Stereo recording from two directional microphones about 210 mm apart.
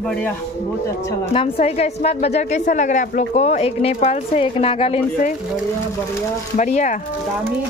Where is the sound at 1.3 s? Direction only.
30° left (ahead or behind).